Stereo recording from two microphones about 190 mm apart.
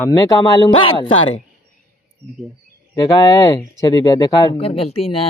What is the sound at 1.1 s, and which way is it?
Speech, 90° left.